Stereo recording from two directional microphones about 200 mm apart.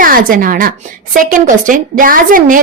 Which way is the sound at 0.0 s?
45° right (ahead or behind).